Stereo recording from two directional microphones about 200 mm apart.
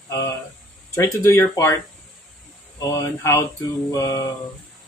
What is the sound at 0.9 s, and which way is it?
Speech, 15° left (ahead or behind).